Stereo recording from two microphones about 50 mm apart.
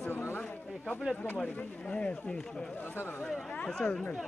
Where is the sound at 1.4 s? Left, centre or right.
Left.